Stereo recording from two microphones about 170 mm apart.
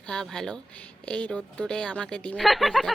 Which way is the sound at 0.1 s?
5° left (ahead or behind).